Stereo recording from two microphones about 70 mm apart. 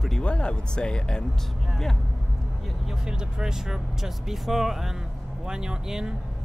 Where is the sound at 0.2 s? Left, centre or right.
Centre.